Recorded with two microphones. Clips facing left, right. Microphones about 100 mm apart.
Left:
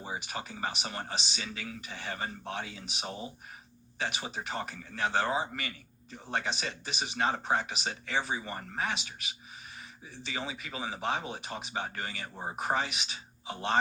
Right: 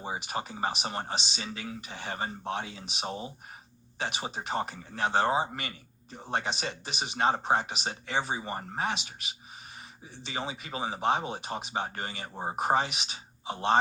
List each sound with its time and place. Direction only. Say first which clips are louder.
0.0 s speech: right 4 dB; 25° right (ahead or behind)